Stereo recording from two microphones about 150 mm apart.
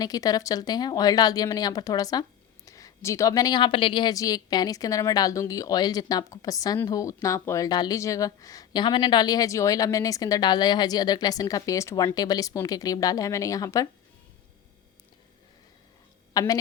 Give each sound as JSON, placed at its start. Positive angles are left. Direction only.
{"t": 0.0, "sound": "a woman's voice", "side_deg": 25}
{"t": 16.3, "sound": "a woman's voice", "side_deg": 25}